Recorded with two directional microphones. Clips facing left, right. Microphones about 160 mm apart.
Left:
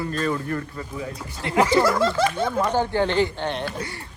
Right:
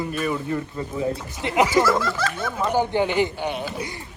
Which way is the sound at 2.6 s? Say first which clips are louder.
Right 2 dB; 10° right (ahead or behind).